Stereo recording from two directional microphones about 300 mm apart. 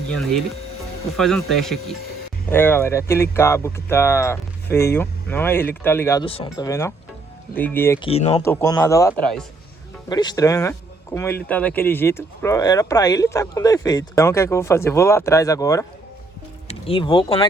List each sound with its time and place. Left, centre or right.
0.1 s speech: centre